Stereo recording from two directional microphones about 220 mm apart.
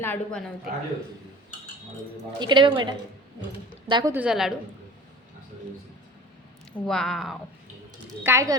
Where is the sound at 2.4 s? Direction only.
20° right (ahead or behind); by 4.5 s centre (ahead or behind).